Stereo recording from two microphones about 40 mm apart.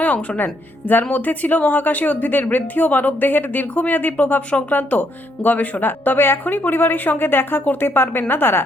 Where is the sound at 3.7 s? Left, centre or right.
Left.